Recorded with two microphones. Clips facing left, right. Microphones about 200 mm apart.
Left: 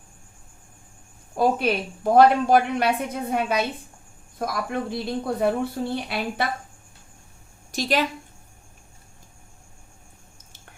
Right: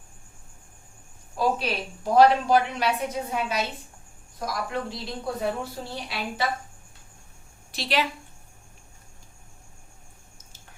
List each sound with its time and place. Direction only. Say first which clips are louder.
1.4 s a woman's voice: left 4 dB; 55° left (ahead or behind)
7.7 s a woman's voice: left 3 dB; 45° left (ahead or behind)